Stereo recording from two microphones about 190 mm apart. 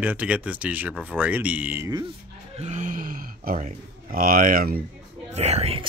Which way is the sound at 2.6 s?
40° right (ahead or behind).